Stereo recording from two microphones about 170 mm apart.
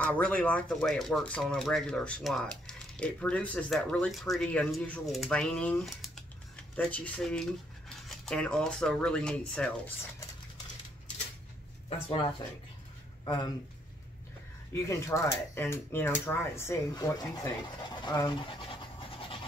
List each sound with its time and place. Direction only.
0.0 s speech: 10° left (ahead or behind)
13.2 s speech: 25° left (ahead or behind)
14.7 s speech: 15° left (ahead or behind)